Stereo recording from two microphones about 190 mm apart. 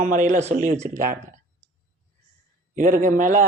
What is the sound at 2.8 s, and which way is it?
Speech, 45° right (ahead or behind).